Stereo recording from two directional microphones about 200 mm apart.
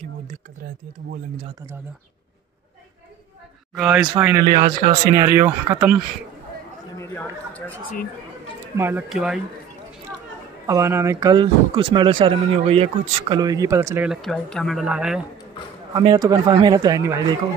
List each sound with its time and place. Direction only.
3.7 s speech: 5° right (ahead or behind)
4.6 s speech: 35° right (ahead or behind)
5.2 s speech: 15° right (ahead or behind)
7.0 s speech: 10° left (ahead or behind)
8.7 s speech: 10° right (ahead or behind)
10.7 s speech: 15° right (ahead or behind)
15.9 s a man's voice: 20° right (ahead or behind)